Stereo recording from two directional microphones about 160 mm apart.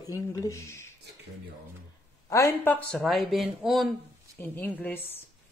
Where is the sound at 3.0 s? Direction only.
Centre (ahead or behind).